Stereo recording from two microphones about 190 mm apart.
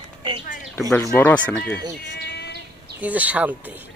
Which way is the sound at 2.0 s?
65° left (ahead or behind).